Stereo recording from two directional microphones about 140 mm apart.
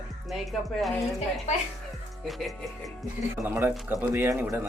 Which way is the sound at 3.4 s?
15° right (ahead or behind).